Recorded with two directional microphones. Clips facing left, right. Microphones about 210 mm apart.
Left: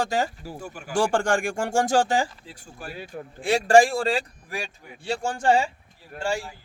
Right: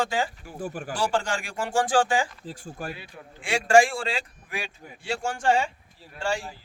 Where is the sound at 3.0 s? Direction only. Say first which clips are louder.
Left 8 dB; 40° left (ahead or behind).